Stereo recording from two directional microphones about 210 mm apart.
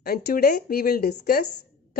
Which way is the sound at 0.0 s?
45° left (ahead or behind).